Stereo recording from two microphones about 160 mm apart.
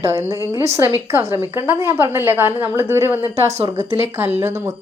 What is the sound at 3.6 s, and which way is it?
A woman's voice, 20° right (ahead or behind).